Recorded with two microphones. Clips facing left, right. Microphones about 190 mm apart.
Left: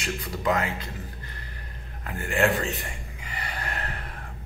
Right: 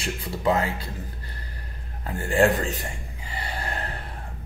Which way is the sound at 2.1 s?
30° right (ahead or behind).